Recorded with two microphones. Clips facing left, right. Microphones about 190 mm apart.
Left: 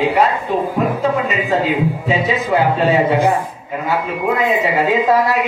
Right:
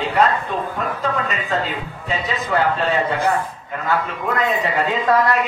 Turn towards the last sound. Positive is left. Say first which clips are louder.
# left 4 dB
turn(degrees=10)  # may be behind; listen again after turning